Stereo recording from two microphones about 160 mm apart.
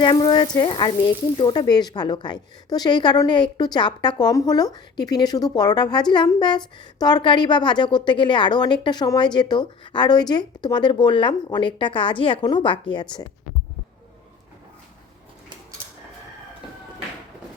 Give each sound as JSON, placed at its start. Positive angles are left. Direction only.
{"t": 0.0, "sound": "frying", "side_deg": 30}